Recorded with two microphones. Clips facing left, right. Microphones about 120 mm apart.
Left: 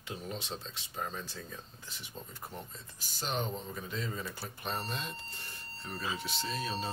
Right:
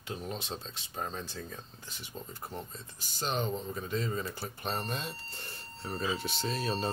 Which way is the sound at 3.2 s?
35° right (ahead or behind).